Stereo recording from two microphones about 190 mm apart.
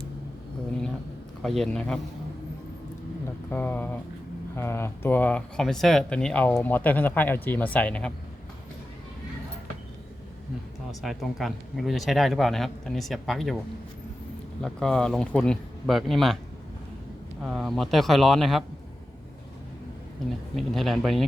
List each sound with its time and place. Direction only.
1.4 s a man's voice: centre (ahead or behind)
3.5 s speech: 10° left (ahead or behind)
11.0 s a man's voice: centre (ahead or behind)
14.6 s a man's voice: 5° left (ahead or behind)
17.4 s a man's voice: centre (ahead or behind)
20.6 s a man's voice: centre (ahead or behind)